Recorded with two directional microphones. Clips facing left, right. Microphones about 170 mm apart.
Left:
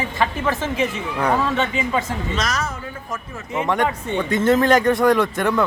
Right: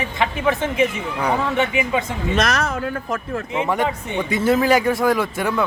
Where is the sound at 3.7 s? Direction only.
10° right (ahead or behind).